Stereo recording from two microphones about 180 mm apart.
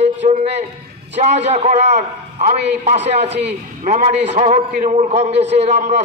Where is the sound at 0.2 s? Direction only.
45° right (ahead or behind).